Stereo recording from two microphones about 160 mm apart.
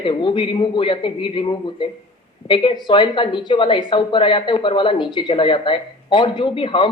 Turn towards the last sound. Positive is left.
turn(degrees=30)  # may be behind; listen again after turning